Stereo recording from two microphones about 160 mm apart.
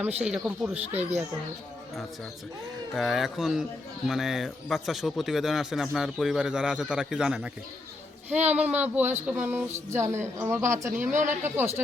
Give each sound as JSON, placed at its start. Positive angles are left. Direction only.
{"t": 0.2, "sound": "speech", "side_deg": -10}
{"t": 2.9, "sound": "speech", "side_deg": 0}